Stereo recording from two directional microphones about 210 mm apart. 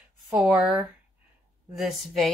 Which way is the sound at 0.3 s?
5° right (ahead or behind).